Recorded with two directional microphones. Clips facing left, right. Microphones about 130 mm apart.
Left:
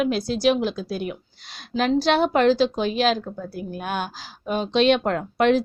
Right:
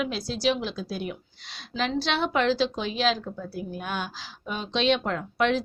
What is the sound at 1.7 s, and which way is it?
A woman's voice, 45° left (ahead or behind).